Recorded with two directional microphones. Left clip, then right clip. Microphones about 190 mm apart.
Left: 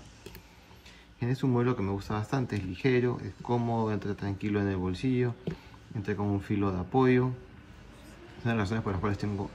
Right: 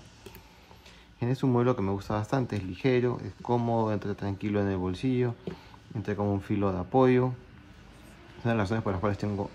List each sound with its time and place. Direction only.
1.2 s speech: 20° right (ahead or behind)
8.5 s speech: 20° right (ahead or behind)